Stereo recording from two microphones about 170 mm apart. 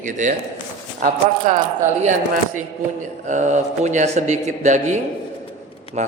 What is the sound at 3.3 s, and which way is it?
A man's voice, 45° right (ahead or behind).